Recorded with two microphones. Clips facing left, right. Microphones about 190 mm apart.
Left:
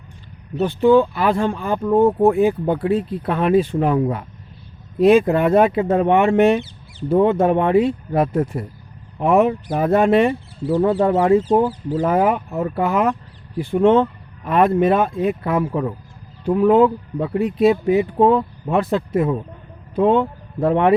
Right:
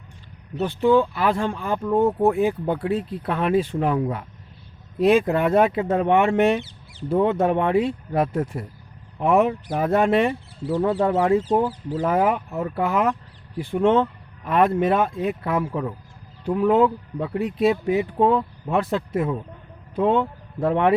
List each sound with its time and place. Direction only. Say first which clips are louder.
0.6 s speech: left 4 dB; 40° left (ahead or behind)
3.2 s speech: left 4 dB; 35° left (ahead or behind)
4.9 s speech: left 5 dB; 50° left (ahead or behind)
5.3 s speech: left 4 dB; 40° left (ahead or behind)
6.1 s speech: left 4 dB; 50° left (ahead or behind)
7.1 s speech: left 4 dB; 40° left (ahead or behind)
7.8 s speech: left 4 dB; 45° left (ahead or behind)
11.4 s speech: left 4 dB; 45° left (ahead or behind)
17.3 s speech: left 5 dB; 55° left (ahead or behind)
18.2 s speech: left 4 dB; 35° left (ahead or behind)